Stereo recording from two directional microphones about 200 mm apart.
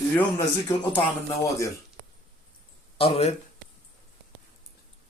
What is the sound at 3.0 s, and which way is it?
Speech, 30° left (ahead or behind).